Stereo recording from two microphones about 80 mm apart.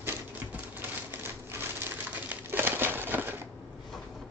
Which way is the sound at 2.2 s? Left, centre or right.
Right.